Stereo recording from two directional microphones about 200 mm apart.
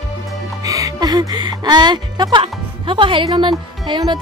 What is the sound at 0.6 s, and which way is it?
A woman's voice, 15° right (ahead or behind).